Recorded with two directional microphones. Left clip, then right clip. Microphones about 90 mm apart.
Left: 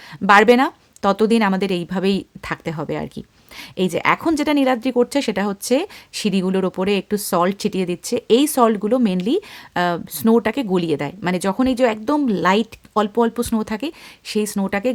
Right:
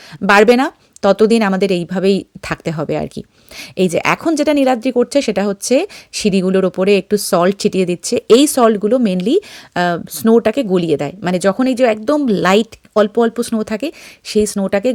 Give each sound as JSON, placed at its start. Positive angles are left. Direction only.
{"t": 0.3, "sound": "speech", "side_deg": -35}
{"t": 2.4, "sound": "speech", "side_deg": -45}
{"t": 4.2, "sound": "speech", "side_deg": -30}
{"t": 8.4, "sound": "speech", "side_deg": -30}
{"t": 12.9, "sound": "speech", "side_deg": -25}